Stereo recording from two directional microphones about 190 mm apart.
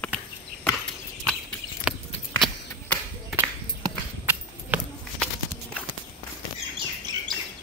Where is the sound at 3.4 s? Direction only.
10° right (ahead or behind).